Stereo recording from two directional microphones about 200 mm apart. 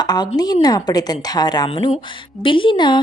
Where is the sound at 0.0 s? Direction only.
20° left (ahead or behind).